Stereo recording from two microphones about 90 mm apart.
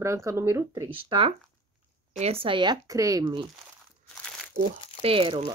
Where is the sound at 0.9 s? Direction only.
85° right.